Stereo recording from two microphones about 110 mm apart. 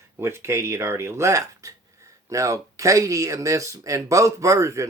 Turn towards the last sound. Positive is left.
turn(degrees=-30)  # may be behind; listen again after turning